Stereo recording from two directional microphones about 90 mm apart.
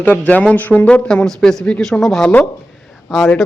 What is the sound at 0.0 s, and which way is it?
Speech, 15° left (ahead or behind).